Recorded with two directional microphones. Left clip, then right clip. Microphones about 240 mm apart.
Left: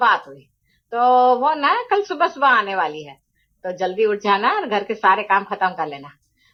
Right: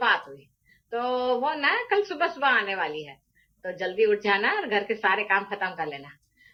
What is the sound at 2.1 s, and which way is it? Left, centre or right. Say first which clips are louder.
A woman's voice: left 10 dB; left.